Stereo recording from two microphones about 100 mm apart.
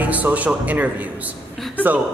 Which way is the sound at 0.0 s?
15° right (ahead or behind).